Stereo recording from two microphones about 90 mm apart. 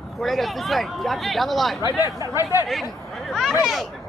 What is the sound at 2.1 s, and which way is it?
Speech, 35° right (ahead or behind).